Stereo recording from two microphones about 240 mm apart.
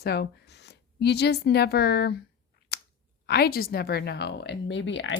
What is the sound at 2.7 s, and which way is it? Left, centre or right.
Finger snapping, left.